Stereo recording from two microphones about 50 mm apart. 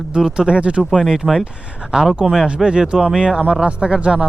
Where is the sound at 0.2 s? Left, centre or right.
Centre.